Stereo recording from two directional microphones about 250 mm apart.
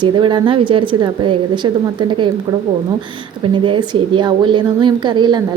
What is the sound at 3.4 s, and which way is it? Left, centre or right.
A woman's voice, centre.